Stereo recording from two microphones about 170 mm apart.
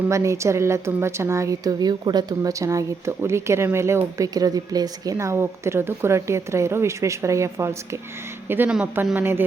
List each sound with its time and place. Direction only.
0.1 s a woman's voice: 15° right (ahead or behind)